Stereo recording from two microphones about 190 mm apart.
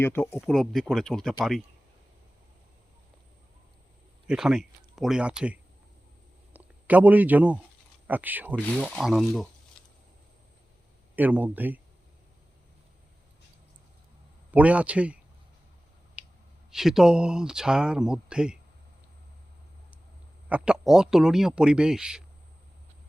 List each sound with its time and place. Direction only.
0.0 s speech: 10° left (ahead or behind)
0.4 s speech: centre (ahead or behind)
4.3 s speech: 5° right (ahead or behind)
11.1 s speech: 10° right (ahead or behind)
14.5 s speech: 5° right (ahead or behind)
16.7 s speech: centre (ahead or behind)
20.5 s speech: 5° right (ahead or behind)